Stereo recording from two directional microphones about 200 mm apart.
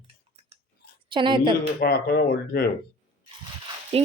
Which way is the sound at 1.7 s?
50° left (ahead or behind).